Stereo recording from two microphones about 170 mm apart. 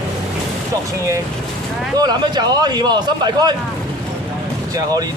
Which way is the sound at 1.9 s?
25° right (ahead or behind).